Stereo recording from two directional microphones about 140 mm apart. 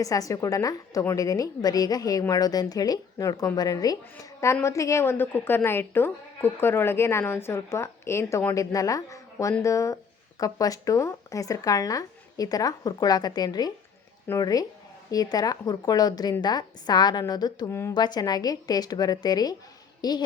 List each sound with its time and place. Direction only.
0.0 s speech: 25° left (ahead or behind)
17.7 s speech: 20° left (ahead or behind)
17.9 s a woman's voice: 30° left (ahead or behind)